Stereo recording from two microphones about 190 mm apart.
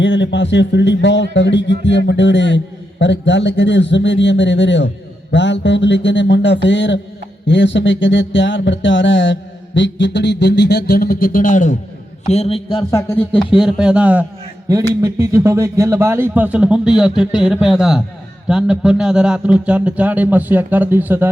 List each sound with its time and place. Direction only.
0.0 s a sound: 70° left (ahead or behind); by 11.8 s 40° left (ahead or behind)
12.2 s a man's voice: 35° left (ahead or behind)
12.9 s speech: 15° left (ahead or behind)
13.4 s speech: centre (ahead or behind)
14.7 s speech: 20° right (ahead or behind)